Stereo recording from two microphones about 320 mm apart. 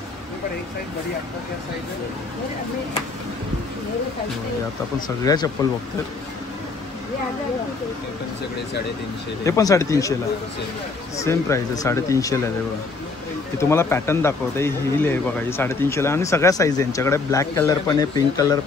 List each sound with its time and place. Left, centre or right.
5.0 s speech: centre
9.4 s speech: centre
11.1 s speech: centre
13.6 s speech: centre